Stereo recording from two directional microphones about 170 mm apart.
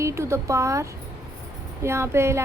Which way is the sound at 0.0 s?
15° right (ahead or behind).